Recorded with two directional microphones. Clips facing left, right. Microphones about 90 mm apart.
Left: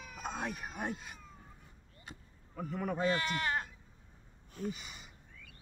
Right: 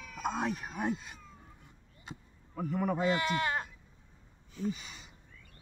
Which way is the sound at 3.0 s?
20° right (ahead or behind).